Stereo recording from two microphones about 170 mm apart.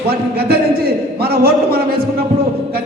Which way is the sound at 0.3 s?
65° right (ahead or behind).